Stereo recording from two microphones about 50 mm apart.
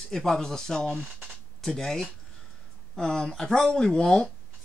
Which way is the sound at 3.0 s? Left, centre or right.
Centre.